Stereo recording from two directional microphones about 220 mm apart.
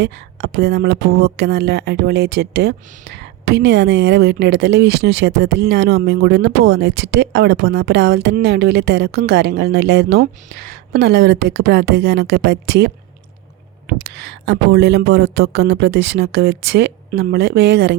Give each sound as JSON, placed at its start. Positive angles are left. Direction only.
{"t": 0.0, "sound": "a woman's voice", "side_deg": -50}